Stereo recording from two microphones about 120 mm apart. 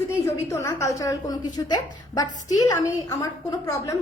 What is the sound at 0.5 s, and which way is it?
A woman's voice, 25° left (ahead or behind).